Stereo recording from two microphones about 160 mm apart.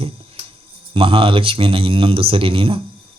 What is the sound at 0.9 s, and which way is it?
Speech, 35° right (ahead or behind).